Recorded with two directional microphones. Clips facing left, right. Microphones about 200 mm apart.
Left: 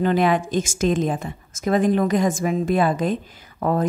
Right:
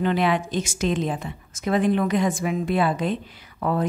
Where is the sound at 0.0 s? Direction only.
45° left (ahead or behind).